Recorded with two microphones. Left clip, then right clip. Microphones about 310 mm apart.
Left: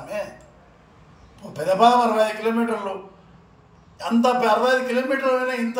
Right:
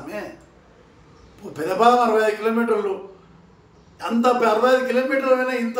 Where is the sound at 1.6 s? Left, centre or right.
Centre.